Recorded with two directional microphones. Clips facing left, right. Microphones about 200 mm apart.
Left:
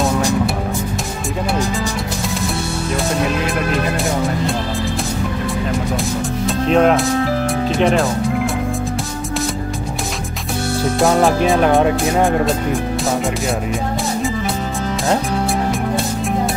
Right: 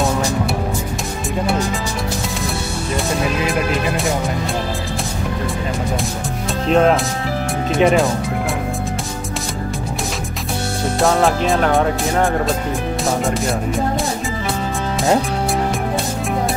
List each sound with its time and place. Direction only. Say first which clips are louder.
6.7 s speech: left 1 dB; centre (ahead or behind)
11.4 s speech: left 3 dB; 15° left (ahead or behind)